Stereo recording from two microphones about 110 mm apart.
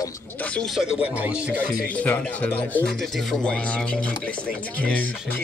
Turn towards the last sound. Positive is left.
turn(degrees=15)  # may be behind; listen again after turning